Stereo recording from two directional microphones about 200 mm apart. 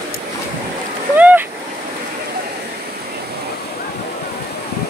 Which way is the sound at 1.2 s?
5° right (ahead or behind).